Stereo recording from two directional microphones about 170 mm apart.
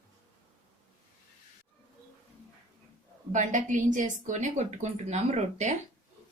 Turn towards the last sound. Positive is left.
turn(degrees=-40)  # may be behind; listen again after turning